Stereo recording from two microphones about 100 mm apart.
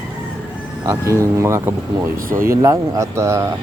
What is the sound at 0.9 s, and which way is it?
Speech, 30° right (ahead or behind).